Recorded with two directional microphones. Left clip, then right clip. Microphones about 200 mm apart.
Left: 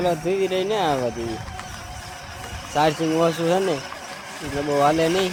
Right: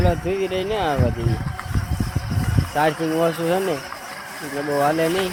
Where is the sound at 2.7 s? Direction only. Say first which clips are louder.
Even; 10° left (ahead or behind).